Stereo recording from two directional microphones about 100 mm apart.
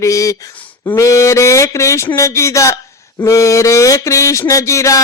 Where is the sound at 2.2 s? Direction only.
30° left (ahead or behind).